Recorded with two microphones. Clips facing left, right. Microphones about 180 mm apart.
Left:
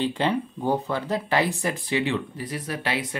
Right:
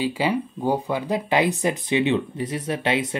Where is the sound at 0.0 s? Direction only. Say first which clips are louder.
Right 1 dB; 5° right (ahead or behind).